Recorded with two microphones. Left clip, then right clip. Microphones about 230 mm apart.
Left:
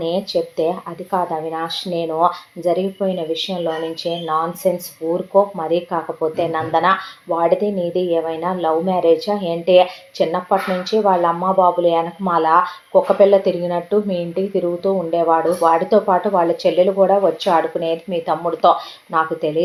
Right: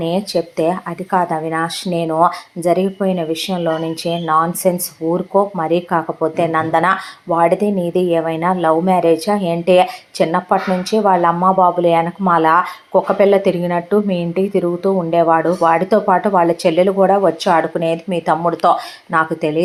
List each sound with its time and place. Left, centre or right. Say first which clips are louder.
0.0 s speech: right 1 dB; right